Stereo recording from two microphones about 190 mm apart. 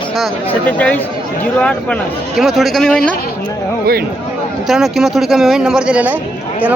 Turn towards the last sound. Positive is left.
turn(degrees=-5)  # may be behind; listen again after turning